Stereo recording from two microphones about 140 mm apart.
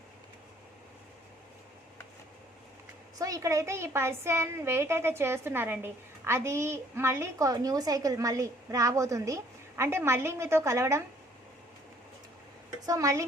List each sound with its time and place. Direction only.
3.2 s a woman's voice: 25° right (ahead or behind)
12.8 s speech: 25° right (ahead or behind)